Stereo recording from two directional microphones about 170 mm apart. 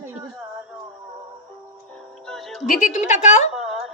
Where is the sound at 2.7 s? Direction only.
50° left (ahead or behind).